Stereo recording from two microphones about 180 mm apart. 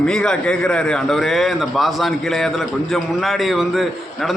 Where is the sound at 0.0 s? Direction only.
5° left (ahead or behind).